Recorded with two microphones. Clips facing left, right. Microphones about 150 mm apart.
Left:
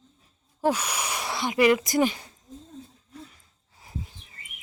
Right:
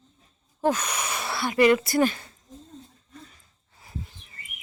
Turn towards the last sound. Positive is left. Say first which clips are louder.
# left 3 dB
turn(degrees=10)  # may be behind; listen again after turning